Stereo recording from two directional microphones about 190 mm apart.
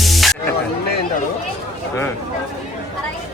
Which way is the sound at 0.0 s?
Centre (ahead or behind).